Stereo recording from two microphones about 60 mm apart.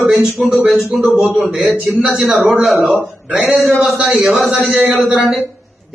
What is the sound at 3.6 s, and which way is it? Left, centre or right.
Speech, centre.